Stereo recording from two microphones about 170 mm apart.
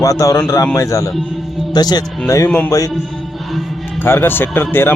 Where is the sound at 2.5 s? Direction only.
10° left (ahead or behind).